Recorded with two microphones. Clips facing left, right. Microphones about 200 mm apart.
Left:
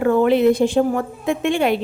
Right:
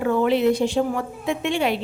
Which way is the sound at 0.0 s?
50° left (ahead or behind).